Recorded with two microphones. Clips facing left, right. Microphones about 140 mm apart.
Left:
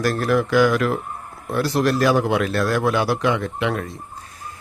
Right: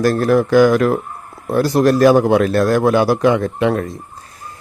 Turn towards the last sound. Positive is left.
turn(degrees=-40)  # may be behind; listen again after turning